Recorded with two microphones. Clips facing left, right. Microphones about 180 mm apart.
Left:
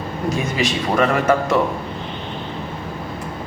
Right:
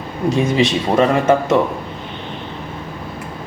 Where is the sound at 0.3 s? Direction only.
30° right (ahead or behind).